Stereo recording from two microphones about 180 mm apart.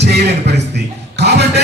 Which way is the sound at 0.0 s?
70° right (ahead or behind).